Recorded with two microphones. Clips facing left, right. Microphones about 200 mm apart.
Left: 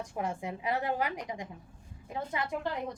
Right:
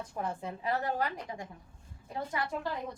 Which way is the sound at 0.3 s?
15° left (ahead or behind).